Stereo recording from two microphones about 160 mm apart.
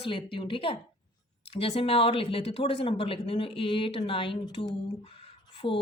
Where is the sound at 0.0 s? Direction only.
35° left (ahead or behind).